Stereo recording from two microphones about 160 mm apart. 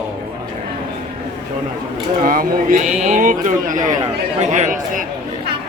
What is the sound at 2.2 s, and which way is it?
Speech, 60° right (ahead or behind).